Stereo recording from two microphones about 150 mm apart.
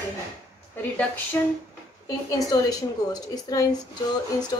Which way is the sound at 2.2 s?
20° left (ahead or behind).